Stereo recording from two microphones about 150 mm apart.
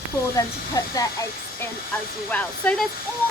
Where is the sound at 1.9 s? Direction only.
10° left (ahead or behind).